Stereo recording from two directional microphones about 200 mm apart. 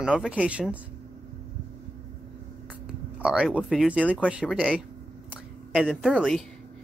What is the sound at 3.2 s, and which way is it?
Speech, 5° right (ahead or behind).